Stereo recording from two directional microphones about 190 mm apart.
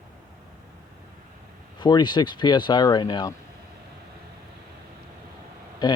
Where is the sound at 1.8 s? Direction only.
25° left (ahead or behind).